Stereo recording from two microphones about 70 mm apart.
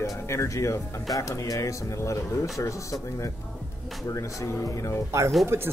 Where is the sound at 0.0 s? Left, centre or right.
Left.